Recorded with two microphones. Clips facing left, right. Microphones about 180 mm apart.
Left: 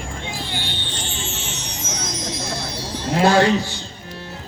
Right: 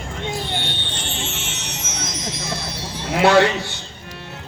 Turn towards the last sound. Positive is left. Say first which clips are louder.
# right 1 dB
turn(degrees=-65)  # may be behind; listen again after turning